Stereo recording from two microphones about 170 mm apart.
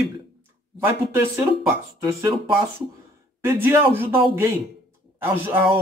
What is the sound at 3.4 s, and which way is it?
Speech, 15° right (ahead or behind).